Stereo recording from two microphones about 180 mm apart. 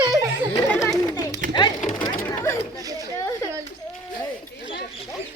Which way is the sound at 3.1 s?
15° left (ahead or behind).